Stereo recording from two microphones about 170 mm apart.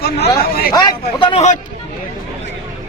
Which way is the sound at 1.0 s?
35° left (ahead or behind).